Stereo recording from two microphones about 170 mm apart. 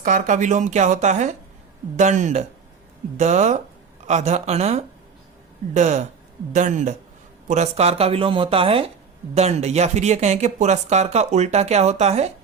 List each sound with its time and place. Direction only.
0.0 s speech: 50° right (ahead or behind)